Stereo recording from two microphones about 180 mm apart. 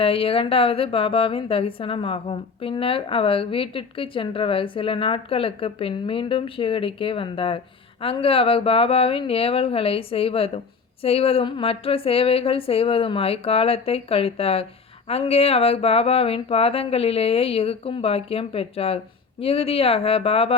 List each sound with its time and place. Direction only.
0.0 s a woman's voice: 30° left (ahead or behind)